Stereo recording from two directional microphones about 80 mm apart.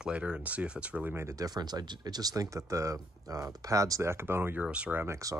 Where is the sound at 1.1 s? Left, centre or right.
Right.